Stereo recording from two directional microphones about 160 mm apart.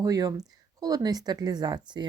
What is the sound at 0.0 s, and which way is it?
Speech, 20° right (ahead or behind).